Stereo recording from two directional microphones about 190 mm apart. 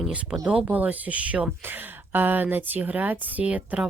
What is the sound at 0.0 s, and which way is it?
Speech, centre (ahead or behind).